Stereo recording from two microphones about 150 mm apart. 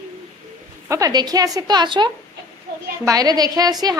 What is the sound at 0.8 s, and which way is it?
A woman's voice, 20° right (ahead or behind).